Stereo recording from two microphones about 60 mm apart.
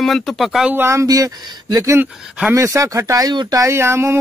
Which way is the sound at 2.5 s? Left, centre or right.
Right.